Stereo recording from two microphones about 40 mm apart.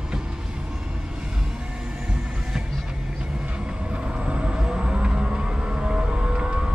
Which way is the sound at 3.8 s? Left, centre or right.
Right.